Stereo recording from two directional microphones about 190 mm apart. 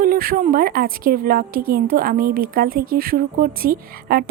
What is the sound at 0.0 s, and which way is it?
Speech, 50° right (ahead or behind).